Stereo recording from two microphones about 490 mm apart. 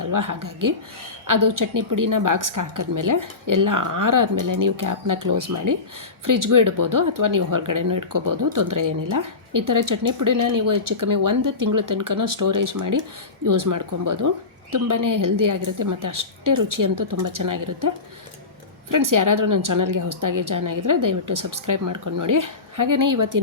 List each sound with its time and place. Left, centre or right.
0.0 s speech: right